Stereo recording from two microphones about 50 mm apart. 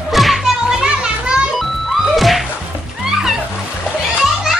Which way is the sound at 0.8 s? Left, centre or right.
Centre.